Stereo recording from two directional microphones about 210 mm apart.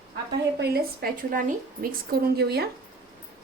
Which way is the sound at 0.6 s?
50° right (ahead or behind).